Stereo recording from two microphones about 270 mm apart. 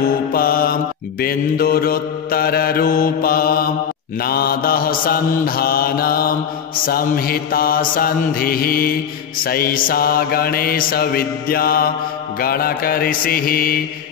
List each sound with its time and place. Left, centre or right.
0.0 s mantra: left